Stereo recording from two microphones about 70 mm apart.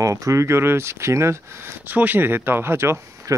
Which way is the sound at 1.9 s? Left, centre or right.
Right.